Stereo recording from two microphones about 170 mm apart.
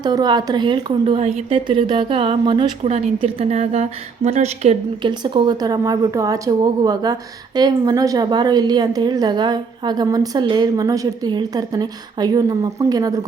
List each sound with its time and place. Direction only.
0.0 s a woman's voice: 25° right (ahead or behind)